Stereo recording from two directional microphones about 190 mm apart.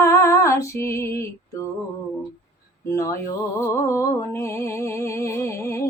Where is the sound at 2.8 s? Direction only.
15° left (ahead or behind).